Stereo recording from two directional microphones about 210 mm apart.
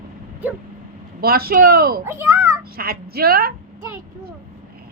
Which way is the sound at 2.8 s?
45° right (ahead or behind).